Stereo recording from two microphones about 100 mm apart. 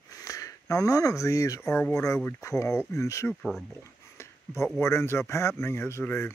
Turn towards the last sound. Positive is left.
turn(degrees=25)  # may be behind; listen again after turning